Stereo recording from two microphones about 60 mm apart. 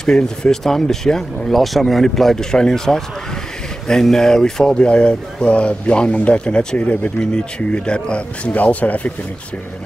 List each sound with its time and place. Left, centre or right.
0.0 s speech: centre; by 9.1 s left